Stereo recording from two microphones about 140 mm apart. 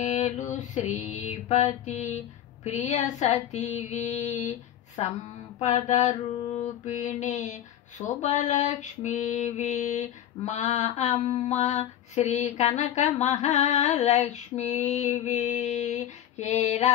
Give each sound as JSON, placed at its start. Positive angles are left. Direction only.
{"t": 0.0, "sound": "female singing", "side_deg": 60}
{"t": 16.6, "sound": "mantra", "side_deg": 55}